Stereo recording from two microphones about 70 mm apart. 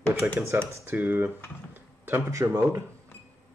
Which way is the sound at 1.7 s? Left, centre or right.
Right.